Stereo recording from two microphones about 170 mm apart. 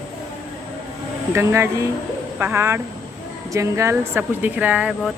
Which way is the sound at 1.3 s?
15° right (ahead or behind).